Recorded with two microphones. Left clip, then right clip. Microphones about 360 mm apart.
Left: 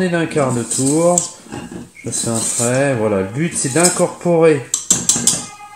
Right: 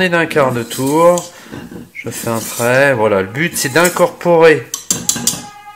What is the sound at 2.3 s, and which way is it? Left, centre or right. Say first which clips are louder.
Speech: right 5 dB; right.